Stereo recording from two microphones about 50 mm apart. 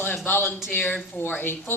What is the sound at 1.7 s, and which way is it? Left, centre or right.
Speech, left.